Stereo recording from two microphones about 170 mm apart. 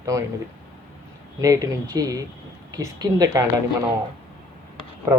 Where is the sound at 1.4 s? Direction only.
20° right (ahead or behind).